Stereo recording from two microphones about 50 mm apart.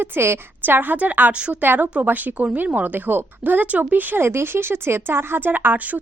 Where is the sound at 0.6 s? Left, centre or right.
Right.